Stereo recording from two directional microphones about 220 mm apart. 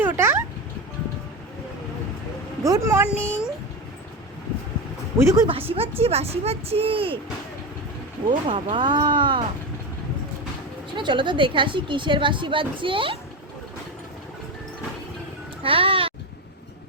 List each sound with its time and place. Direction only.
0.0 s a sound: 10° right (ahead or behind)
2.6 s speech: 15° right (ahead or behind)
3.1 s a child's voice: 5° left (ahead or behind)
5.2 s speech: 15° right (ahead or behind)
5.5 s a woman's voice: 25° right (ahead or behind)
8.3 s a woman's voice: 20° right (ahead or behind)
10.9 s a woman's voice: 20° right (ahead or behind)
15.6 s speech: 25° right (ahead or behind)